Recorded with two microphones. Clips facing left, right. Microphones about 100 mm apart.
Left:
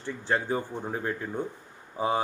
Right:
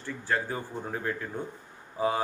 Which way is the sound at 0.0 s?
20° left (ahead or behind).